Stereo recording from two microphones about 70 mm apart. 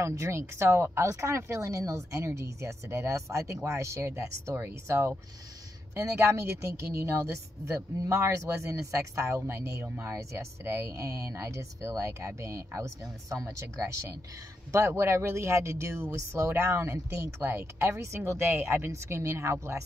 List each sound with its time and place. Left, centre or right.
0.0 s speech: right